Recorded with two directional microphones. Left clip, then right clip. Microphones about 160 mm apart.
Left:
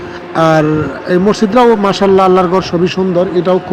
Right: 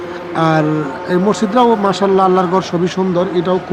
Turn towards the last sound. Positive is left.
turn(degrees=10)  # may be behind; listen again after turning